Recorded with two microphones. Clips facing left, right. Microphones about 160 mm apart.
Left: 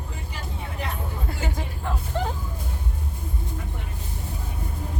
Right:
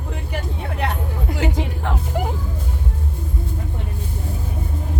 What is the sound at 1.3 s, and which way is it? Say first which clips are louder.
Speech: right 8 dB; 80° right.